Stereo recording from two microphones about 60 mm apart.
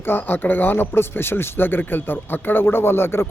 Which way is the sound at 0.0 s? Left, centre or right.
Left.